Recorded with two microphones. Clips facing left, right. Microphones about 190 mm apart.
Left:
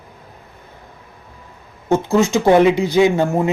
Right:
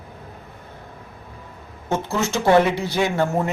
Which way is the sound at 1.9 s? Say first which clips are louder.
Left 8 dB; 15° left (ahead or behind).